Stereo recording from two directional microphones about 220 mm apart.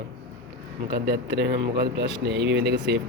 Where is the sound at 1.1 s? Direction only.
50° right (ahead or behind).